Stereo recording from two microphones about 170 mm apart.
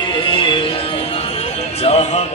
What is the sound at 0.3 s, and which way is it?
Music, 30° left (ahead or behind).